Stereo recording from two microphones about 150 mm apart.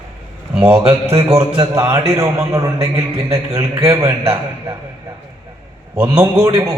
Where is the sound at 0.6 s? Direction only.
15° right (ahead or behind).